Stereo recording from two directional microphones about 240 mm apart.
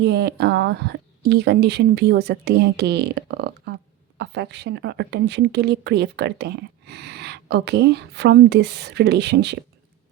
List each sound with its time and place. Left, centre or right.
0.0 s speech: right